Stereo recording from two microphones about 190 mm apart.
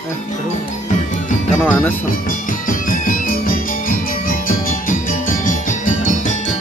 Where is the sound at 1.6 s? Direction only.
10° left (ahead or behind).